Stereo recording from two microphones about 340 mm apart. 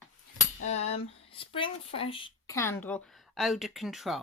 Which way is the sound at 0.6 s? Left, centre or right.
Centre.